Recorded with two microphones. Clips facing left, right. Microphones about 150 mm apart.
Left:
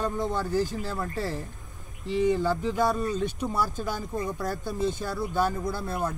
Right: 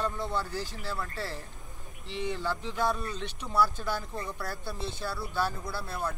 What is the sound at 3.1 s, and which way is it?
Speech, 45° left (ahead or behind).